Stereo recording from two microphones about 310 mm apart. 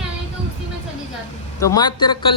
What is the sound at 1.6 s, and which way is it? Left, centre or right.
Speech, centre.